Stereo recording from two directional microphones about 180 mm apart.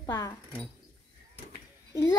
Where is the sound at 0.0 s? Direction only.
20° left (ahead or behind).